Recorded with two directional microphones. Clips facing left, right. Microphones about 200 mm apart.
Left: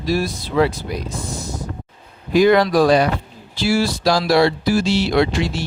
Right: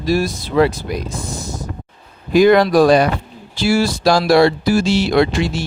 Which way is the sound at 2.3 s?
50° right (ahead or behind).